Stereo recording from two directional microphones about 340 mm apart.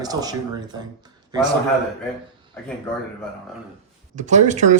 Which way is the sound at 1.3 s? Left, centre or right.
Centre.